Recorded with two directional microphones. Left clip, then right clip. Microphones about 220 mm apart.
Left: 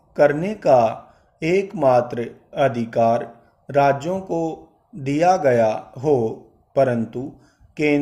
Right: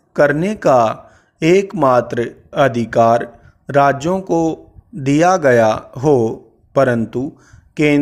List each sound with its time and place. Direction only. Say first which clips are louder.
0.1 s speech: right 3 dB; 45° right (ahead or behind)